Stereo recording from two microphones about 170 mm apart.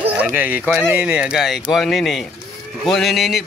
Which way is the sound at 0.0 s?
10° right (ahead or behind).